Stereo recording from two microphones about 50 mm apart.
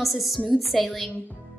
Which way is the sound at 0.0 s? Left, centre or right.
Centre.